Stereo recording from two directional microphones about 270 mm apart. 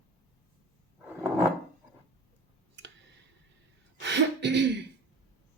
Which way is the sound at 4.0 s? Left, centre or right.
Right.